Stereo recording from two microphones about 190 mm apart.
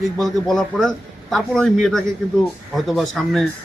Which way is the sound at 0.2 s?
Centre (ahead or behind).